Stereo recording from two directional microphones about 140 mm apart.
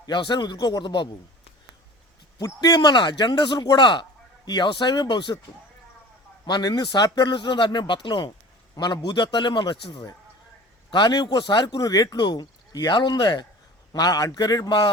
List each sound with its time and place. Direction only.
0.0 s speech: 30° left (ahead or behind)
2.4 s speech: 25° left (ahead or behind)
6.4 s a man's voice: 30° left (ahead or behind)